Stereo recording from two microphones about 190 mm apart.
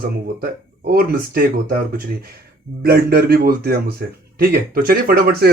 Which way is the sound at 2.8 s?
55° right (ahead or behind).